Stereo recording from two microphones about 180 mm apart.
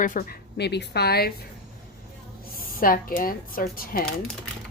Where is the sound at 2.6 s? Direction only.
50° left (ahead or behind).